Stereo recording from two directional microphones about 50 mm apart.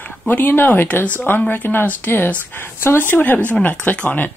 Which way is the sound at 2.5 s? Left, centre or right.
Left.